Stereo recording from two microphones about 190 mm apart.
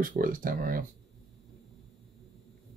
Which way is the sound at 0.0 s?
45° right (ahead or behind).